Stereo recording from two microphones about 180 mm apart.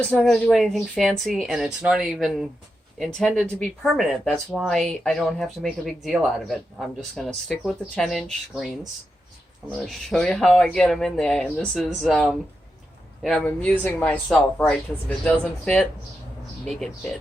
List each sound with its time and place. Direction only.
0.0 s speech: 5° left (ahead or behind)
9.7 s speech: centre (ahead or behind)